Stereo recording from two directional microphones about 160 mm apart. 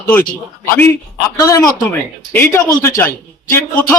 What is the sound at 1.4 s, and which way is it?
A man's voice, 20° left (ahead or behind).